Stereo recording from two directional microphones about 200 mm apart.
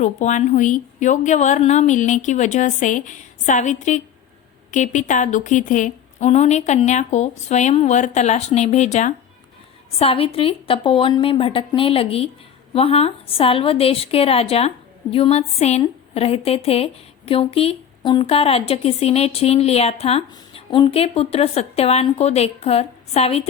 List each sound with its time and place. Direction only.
0.0 s a woman's voice: 35° left (ahead or behind)